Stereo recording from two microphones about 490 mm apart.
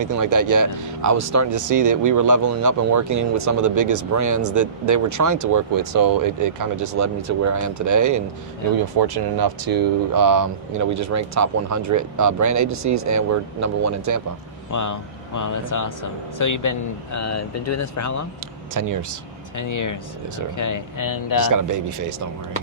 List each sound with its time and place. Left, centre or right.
0.0 s speech: right
9.0 s speech: right
14.7 s speech: left
18.7 s speech: right
19.5 s speech: left